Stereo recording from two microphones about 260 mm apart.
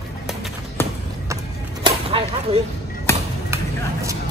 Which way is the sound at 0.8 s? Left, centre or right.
Centre.